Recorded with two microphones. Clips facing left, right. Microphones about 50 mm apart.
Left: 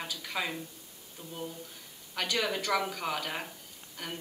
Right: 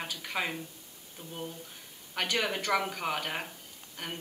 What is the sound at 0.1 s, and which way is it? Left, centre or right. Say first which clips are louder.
Speech: right 1 dB; right.